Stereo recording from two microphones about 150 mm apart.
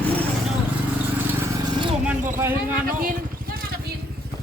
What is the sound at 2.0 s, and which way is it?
Vehicle, 15° right (ahead or behind).